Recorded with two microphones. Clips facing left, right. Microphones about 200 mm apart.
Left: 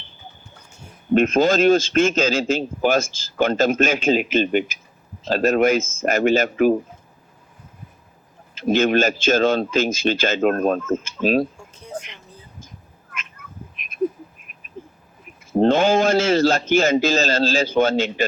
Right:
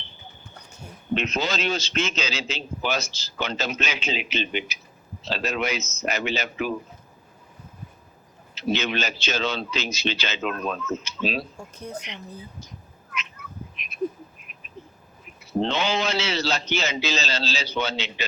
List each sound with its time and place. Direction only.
1.1 s a man's voice: 50° left (ahead or behind)
8.5 s a man's voice: 50° left (ahead or behind)
11.5 s speech: 40° right (ahead or behind)
11.9 s a man's voice: 45° left (ahead or behind)
12.6 s cat: 50° left (ahead or behind)
14.8 s a sound: 50° left (ahead or behind)
15.5 s a man's voice: 50° left (ahead or behind)